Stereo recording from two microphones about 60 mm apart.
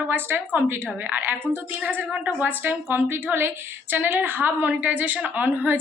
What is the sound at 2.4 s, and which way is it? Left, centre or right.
A woman's voice, right.